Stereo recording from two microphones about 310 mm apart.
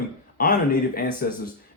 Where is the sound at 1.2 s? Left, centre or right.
Left.